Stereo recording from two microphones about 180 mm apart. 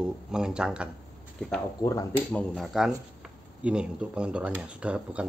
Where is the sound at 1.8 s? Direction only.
20° left (ahead or behind).